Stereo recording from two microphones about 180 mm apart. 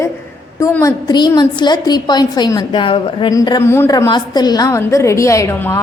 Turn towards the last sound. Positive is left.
turn(degrees=15)  # may be behind; listen again after turning